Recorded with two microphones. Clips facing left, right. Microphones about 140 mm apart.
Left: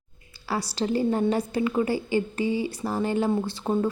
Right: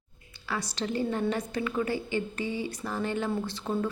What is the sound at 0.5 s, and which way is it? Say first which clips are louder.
Speech: left 5 dB; 35° left (ahead or behind).